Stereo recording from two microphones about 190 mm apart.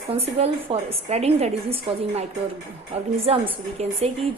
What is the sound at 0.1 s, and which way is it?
A woman's voice, 30° right (ahead or behind).